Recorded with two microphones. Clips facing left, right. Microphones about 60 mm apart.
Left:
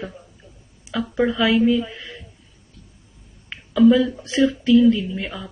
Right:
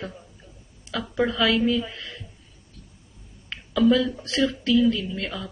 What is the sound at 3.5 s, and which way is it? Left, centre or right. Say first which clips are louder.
Speech: left 5 dB; centre.